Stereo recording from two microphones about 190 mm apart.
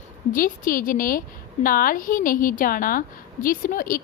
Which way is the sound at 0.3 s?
45° left (ahead or behind).